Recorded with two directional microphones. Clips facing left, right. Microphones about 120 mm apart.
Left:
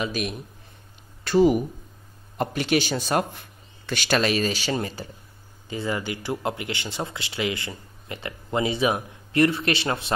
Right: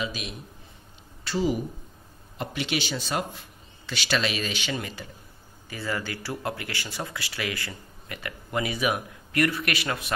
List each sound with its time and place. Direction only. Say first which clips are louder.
0.0 s speech: left 5 dB; 50° left (ahead or behind); by 5.0 s 35° left (ahead or behind)
5.7 s speech: left 4 dB; 20° left (ahead or behind)